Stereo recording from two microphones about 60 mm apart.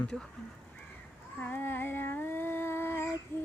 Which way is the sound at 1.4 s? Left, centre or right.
Left.